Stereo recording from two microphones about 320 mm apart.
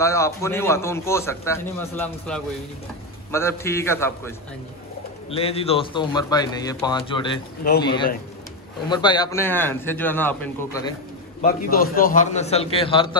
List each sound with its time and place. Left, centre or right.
0.0 s a man's voice: centre
5.3 s a man's voice: centre
11.4 s a man's voice: left